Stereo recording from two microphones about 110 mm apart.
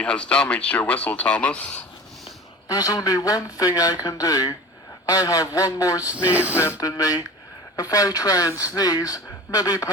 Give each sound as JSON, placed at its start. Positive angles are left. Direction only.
{"t": 0.0, "sound": "speech", "side_deg": 10}
{"t": 2.6, "sound": "speech", "side_deg": 35}
{"t": 6.1, "sound": "a sound", "side_deg": -15}
{"t": 6.7, "sound": "speech", "side_deg": 35}